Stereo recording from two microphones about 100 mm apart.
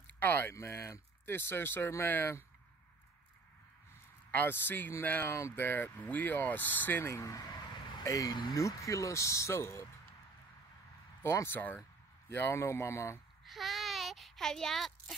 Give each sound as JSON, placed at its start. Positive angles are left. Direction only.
{"t": 0.0, "sound": "speech", "side_deg": 20}
{"t": 4.3, "sound": "speech", "side_deg": 20}
{"t": 11.2, "sound": "speech", "side_deg": 25}
{"t": 13.5, "sound": "a sound", "side_deg": 0}